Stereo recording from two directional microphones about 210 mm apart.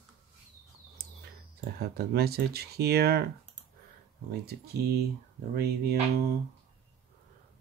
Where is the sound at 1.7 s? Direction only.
50° right (ahead or behind).